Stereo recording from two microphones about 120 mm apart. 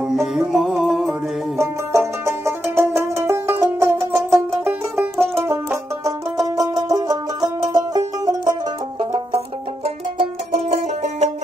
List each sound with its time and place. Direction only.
0.1 s music: centre (ahead or behind)
1.6 s music: 25° right (ahead or behind)
5.2 s banjo: 20° right (ahead or behind)
6.4 s music: 30° right (ahead or behind)
10.7 s music: 65° right (ahead or behind)